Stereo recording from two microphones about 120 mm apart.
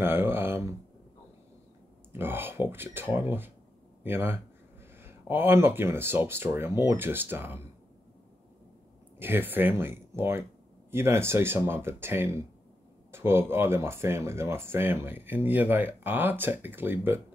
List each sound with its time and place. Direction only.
0.0 s a sound: 20° right (ahead or behind)
2.1 s speech: 15° right (ahead or behind)
9.2 s speech: 15° right (ahead or behind)